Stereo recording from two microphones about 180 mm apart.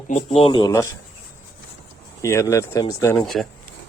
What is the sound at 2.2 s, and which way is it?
Speech, 15° left (ahead or behind).